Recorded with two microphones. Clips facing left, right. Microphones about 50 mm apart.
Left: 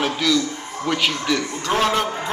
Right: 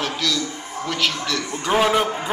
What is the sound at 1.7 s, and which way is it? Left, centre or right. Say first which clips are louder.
Speech: right 2 dB; centre.